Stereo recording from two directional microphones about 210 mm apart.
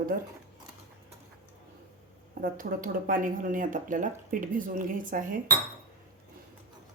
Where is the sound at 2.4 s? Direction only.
40° right (ahead or behind).